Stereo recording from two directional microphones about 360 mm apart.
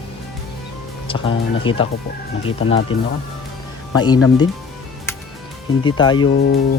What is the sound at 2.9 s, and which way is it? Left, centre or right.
Speech, centre.